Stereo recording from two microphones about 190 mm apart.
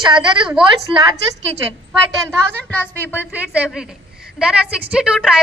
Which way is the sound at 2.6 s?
10° left (ahead or behind).